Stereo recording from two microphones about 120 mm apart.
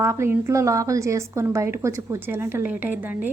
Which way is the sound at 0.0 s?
20° right (ahead or behind).